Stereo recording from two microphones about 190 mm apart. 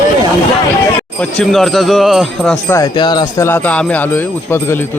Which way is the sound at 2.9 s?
25° left (ahead or behind).